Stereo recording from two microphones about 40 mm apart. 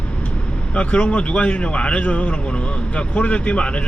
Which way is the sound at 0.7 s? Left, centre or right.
Left.